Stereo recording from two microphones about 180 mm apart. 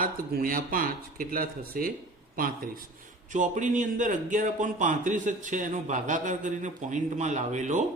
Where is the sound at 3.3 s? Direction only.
45° right (ahead or behind).